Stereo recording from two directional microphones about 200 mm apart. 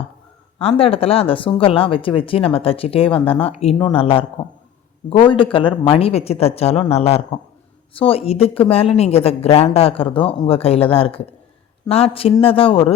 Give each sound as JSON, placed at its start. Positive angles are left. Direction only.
{"t": 0.6, "sound": "speech", "side_deg": 30}
{"t": 5.3, "sound": "speech", "side_deg": 25}